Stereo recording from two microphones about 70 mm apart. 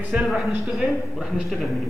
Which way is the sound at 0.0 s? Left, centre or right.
Centre.